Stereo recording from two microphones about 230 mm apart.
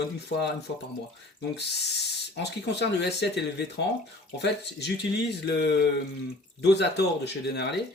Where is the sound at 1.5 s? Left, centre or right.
Left.